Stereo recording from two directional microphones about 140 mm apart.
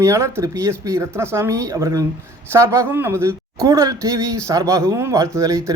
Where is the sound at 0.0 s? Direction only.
20° right (ahead or behind).